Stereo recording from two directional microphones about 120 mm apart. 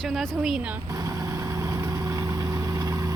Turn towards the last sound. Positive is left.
turn(degrees=-25)  # may be behind; listen again after turning